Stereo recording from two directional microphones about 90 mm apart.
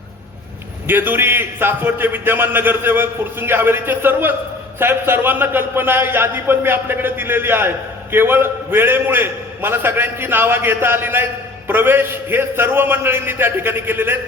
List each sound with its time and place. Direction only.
0.9 s a man's voice: 25° right (ahead or behind)